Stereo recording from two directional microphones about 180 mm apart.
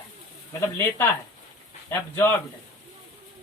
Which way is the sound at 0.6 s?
10° left (ahead or behind).